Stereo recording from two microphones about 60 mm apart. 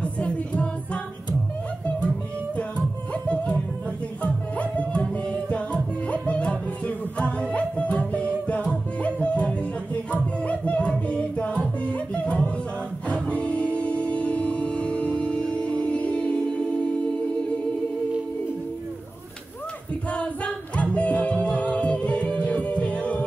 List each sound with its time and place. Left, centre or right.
0.0 s music: left
3.1 s music: centre
20.1 s music: left